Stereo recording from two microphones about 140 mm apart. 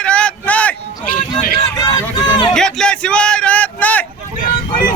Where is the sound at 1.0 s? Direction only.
90° left.